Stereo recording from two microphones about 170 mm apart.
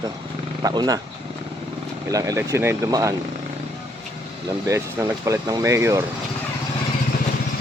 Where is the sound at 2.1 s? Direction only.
20° right (ahead or behind).